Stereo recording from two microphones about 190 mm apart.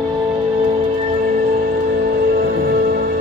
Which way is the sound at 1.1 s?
50° right (ahead or behind).